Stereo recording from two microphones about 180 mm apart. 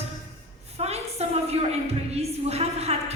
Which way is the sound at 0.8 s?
35° right (ahead or behind).